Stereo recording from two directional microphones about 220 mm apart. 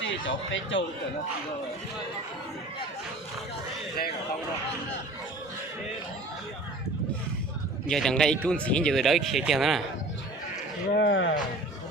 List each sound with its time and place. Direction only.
0.0 s speech: 60° left (ahead or behind)
7.9 s speech: centre (ahead or behind)
10.9 s speech: 55° left (ahead or behind)